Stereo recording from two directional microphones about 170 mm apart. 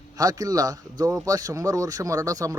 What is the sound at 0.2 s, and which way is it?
Speech, 20° right (ahead or behind).